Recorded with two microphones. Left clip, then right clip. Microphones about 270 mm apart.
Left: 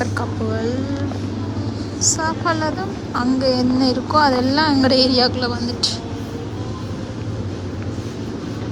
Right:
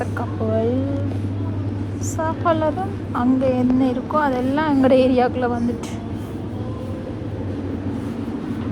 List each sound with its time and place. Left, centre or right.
2.1 s a woman's voice: centre